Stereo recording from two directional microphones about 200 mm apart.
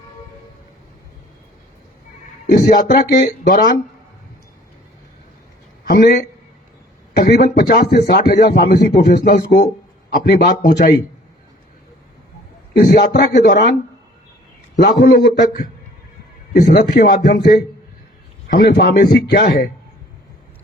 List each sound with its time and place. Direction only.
2.5 s speech: 45° left (ahead or behind)
5.9 s speech: 50° left (ahead or behind)
12.8 s speech: 45° left (ahead or behind)
14.9 s speech: 50° left (ahead or behind)